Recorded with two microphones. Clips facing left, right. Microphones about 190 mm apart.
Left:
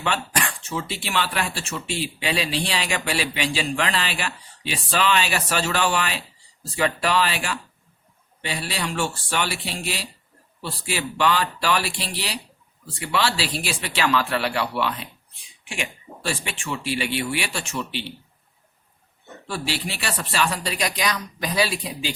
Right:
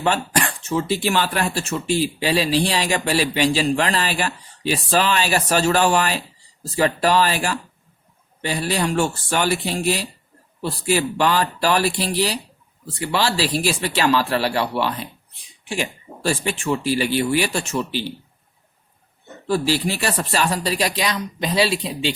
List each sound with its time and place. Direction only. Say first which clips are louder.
0.0 s speech: right 5 dB; 40° right (ahead or behind)
19.5 s speech: right 9 dB; 40° right (ahead or behind)